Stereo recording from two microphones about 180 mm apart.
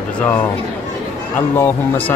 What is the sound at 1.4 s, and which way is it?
Speech, 10° left (ahead or behind).